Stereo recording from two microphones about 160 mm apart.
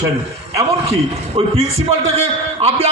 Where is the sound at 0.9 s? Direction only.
40° right (ahead or behind).